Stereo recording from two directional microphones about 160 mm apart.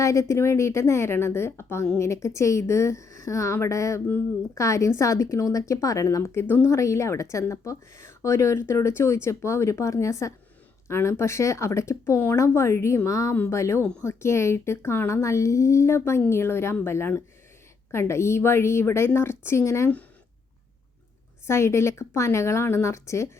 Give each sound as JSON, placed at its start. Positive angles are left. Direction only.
{"t": 0.0, "sound": "a woman's voice", "side_deg": 20}
{"t": 21.4, "sound": "speech", "side_deg": 15}